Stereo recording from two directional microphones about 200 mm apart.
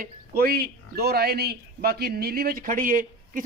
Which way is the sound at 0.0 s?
45° right (ahead or behind).